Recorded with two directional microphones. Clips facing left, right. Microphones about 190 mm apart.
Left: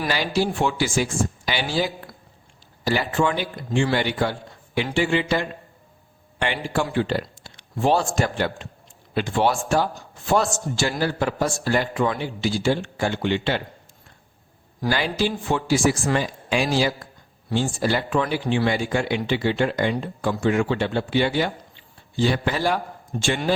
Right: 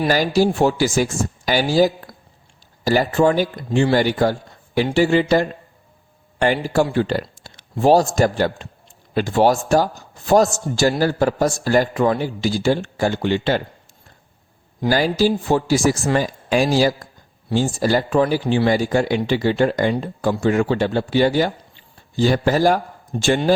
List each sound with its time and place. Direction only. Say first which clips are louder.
0.1 s a man's voice: right 6 dB; 40° right (ahead or behind)
14.8 s a man's voice: right 6 dB; 40° right (ahead or behind)
23.1 s a man's voice: right 3 dB; 30° right (ahead or behind)